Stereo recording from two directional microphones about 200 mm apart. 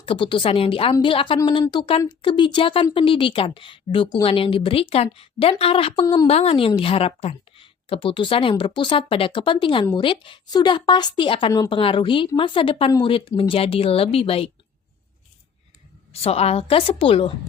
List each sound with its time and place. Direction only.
0.0 s speech: 25° left (ahead or behind)
16.1 s speech: 30° left (ahead or behind)